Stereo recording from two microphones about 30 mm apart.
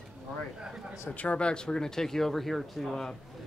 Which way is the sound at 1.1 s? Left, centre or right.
Left.